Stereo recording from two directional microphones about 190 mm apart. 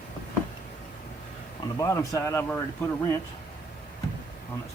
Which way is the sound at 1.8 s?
15° left (ahead or behind).